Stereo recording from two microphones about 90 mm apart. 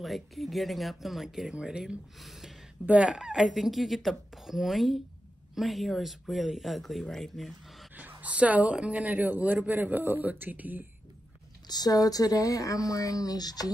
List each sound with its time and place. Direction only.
0.0 s speech: centre (ahead or behind)
7.9 s speech: 15° right (ahead or behind)
11.6 s speech: 50° left (ahead or behind)